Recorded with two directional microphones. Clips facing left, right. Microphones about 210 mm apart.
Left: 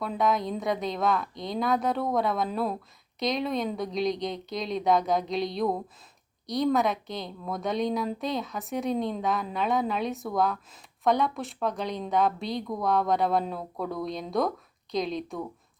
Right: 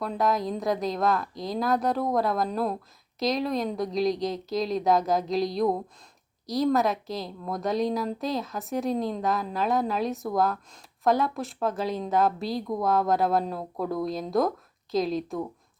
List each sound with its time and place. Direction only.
0.0 s a woman's voice: centre (ahead or behind)